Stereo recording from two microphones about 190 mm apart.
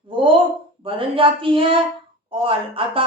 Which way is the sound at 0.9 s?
30° right (ahead or behind).